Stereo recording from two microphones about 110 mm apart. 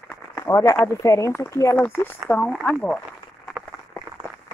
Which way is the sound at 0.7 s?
25° left (ahead or behind).